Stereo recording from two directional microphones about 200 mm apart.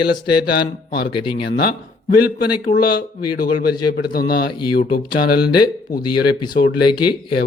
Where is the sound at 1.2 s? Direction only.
25° left (ahead or behind).